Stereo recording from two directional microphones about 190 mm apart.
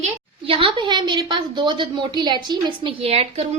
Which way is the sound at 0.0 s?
30° right (ahead or behind).